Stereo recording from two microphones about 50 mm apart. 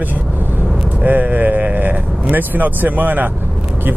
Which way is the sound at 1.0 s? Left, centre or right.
Right.